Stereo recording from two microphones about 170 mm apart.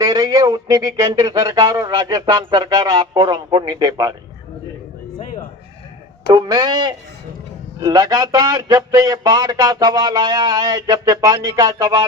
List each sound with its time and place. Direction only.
0.0 s a man's voice: 25° right (ahead or behind)
6.2 s a man's voice: 25° right (ahead or behind)